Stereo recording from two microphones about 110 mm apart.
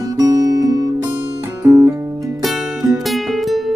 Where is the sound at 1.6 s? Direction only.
20° right (ahead or behind).